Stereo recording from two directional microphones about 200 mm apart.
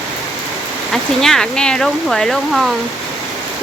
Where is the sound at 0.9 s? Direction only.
Centre (ahead or behind).